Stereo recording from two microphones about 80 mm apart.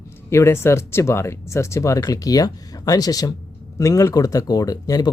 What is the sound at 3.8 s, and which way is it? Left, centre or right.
Speech, left.